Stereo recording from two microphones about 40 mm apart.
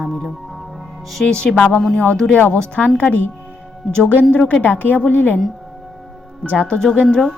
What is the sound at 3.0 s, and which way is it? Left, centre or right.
Speech, left.